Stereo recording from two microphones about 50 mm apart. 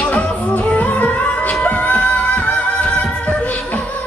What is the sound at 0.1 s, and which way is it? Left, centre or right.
Music, left.